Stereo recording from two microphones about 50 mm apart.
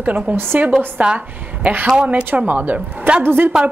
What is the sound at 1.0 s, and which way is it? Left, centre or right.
A woman's voice, right.